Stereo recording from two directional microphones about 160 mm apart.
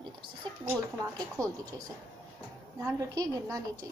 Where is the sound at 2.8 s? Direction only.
15° right (ahead or behind).